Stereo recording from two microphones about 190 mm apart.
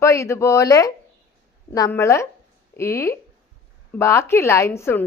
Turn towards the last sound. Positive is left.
turn(degrees=15)  # may be behind; listen again after turning